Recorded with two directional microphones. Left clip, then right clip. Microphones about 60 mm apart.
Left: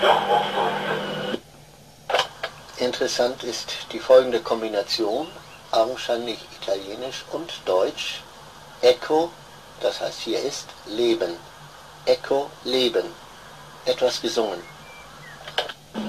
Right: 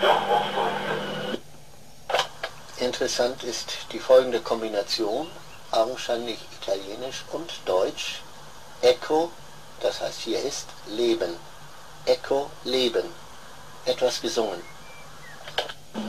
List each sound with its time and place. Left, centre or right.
0.0 s radio: left
2.0 s speech: left
15.4 s a sound: left